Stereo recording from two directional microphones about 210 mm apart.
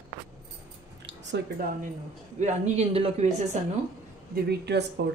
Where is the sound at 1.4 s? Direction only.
55° right (ahead or behind).